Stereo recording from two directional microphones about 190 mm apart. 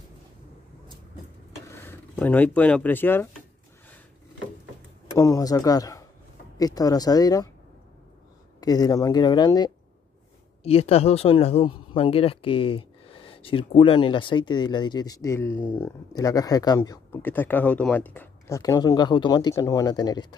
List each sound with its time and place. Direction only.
1.7 s speech: 15° left (ahead or behind)
5.1 s speech: 20° left (ahead or behind)
8.5 s speech: 20° left (ahead or behind)
10.6 s speech: 30° left (ahead or behind)